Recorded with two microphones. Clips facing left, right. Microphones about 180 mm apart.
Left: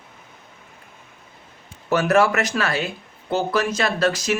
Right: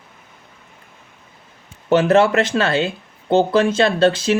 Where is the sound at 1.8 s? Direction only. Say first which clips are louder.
Right 4 dB; 25° right (ahead or behind).